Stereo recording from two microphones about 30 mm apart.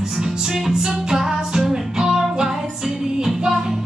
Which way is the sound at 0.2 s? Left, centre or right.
Centre.